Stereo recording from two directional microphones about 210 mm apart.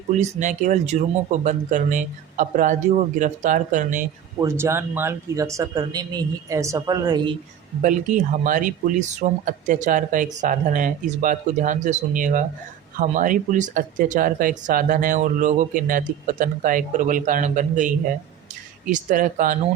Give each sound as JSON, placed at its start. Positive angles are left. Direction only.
{"t": 0.2, "sound": "speech", "side_deg": -35}
{"t": 4.4, "sound": "speech", "side_deg": -10}
{"t": 7.8, "sound": "speech", "side_deg": -40}